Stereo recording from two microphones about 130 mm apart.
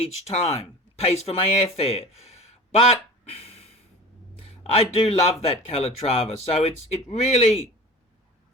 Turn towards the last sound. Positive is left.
turn(degrees=55)  # may be behind; listen again after turning